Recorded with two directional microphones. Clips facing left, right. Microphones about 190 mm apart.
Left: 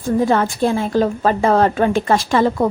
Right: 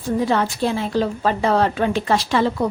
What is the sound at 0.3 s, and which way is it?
A woman's voice, 50° left (ahead or behind).